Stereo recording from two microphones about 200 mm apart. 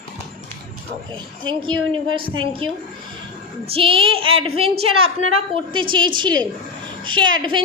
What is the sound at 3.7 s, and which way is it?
A woman's voice, 25° right (ahead or behind).